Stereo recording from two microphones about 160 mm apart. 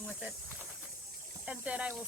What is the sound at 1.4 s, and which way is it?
Speech, 10° right (ahead or behind).